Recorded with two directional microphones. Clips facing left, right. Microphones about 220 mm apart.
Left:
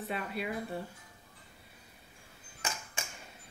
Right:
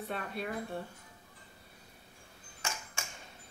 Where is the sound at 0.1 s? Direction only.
5° left (ahead or behind).